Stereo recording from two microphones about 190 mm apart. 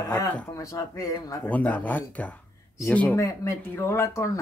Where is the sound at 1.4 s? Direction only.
10° left (ahead or behind).